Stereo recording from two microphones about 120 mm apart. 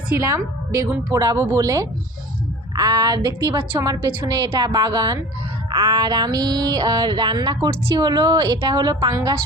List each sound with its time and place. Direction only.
0.1 s a woman's voice: 25° right (ahead or behind)
2.7 s music: 35° right (ahead or behind)